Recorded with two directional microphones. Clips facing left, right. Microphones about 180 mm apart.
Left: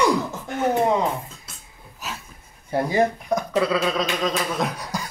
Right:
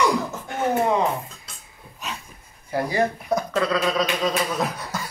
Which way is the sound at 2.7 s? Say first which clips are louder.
Left 2 dB; 25° left (ahead or behind).